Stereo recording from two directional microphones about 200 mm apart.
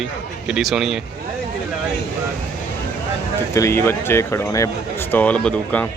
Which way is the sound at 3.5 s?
15° left (ahead or behind).